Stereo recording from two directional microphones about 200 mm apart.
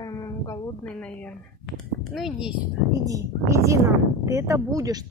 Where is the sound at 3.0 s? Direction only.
15° right (ahead or behind).